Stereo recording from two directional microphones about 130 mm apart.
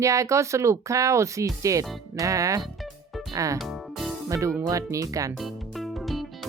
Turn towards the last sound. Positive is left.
turn(degrees=0)  # may be behind; listen again after turning